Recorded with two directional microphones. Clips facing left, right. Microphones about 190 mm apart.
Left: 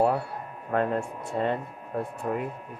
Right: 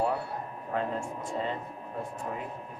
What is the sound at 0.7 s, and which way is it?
Speech, 60° left (ahead or behind).